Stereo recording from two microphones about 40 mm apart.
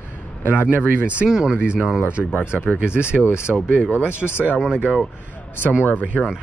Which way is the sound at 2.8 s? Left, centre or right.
Right.